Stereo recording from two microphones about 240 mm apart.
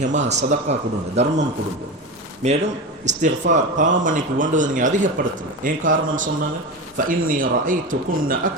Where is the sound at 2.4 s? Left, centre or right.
Right.